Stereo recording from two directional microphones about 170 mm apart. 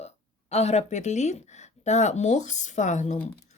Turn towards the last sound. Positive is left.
turn(degrees=45)  # may be behind; listen again after turning